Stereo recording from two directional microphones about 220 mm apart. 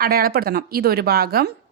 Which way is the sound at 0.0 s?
40° right (ahead or behind).